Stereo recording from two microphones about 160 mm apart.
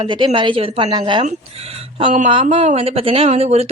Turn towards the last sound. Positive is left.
turn(degrees=-40)  # may be behind; listen again after turning